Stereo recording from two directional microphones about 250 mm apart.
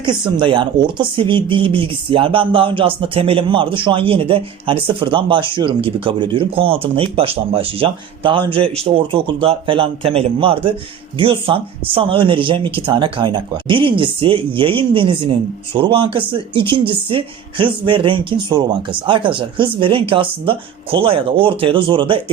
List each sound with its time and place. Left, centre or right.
0.0 s speech: centre